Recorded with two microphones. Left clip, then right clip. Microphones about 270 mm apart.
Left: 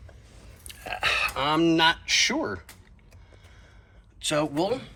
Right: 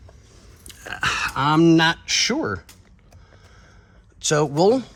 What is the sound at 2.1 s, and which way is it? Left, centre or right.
Speech, right.